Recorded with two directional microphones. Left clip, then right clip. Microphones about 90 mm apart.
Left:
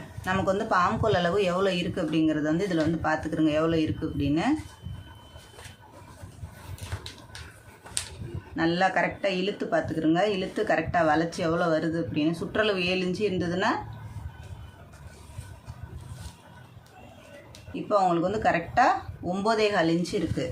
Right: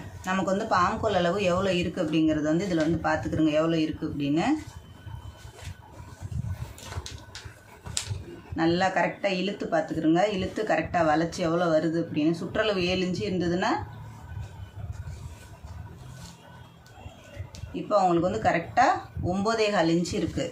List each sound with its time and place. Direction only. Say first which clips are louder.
0.3 s speech: left 1 dB; 40° left (ahead or behind)
8.5 s speech: even; 35° left (ahead or behind)
17.8 s speech: right 1 dB; 30° left (ahead or behind)